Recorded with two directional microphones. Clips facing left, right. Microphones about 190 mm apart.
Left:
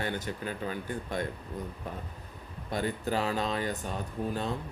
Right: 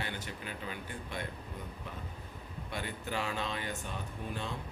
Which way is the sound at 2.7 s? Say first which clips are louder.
Left 8 dB; 40° left (ahead or behind).